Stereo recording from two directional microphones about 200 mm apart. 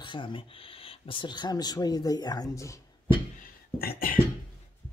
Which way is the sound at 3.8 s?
45° left (ahead or behind).